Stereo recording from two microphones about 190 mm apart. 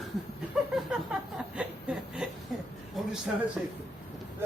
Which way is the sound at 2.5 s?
Centre (ahead or behind).